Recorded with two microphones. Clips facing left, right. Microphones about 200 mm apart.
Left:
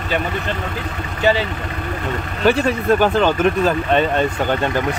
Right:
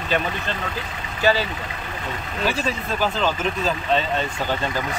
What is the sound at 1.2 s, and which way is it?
Speech, 20° left (ahead or behind).